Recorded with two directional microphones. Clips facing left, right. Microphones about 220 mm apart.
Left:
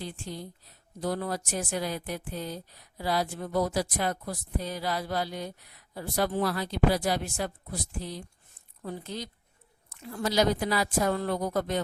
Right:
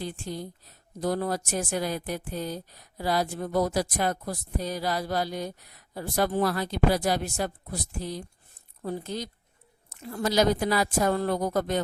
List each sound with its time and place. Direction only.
0.0 s speech: 45° right (ahead or behind)